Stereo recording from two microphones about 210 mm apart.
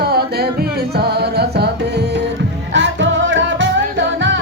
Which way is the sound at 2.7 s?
60° right (ahead or behind).